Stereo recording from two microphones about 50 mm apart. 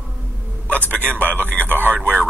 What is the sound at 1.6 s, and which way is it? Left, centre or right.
Speech, right.